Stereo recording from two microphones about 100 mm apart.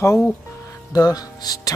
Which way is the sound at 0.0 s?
30° left (ahead or behind).